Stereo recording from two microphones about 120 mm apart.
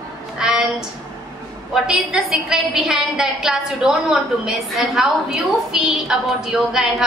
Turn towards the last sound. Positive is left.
turn(degrees=-5)  # may be behind; listen again after turning